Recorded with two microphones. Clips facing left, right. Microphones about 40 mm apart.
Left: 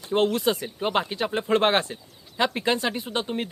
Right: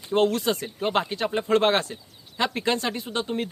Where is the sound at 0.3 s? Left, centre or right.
Centre.